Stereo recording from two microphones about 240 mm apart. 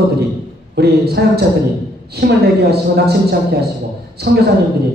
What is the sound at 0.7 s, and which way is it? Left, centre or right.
A woman's voice, right.